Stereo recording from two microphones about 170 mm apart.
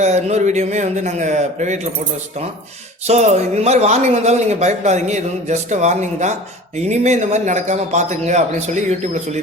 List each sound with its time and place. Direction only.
0.0 s a man's voice: 40° right (ahead or behind)
3.1 s a man's voice: 40° right (ahead or behind)